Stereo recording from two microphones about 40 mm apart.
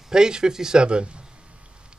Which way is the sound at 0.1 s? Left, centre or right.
Centre.